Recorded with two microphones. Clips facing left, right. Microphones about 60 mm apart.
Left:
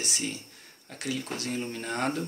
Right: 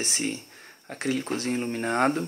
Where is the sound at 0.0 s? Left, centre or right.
Right.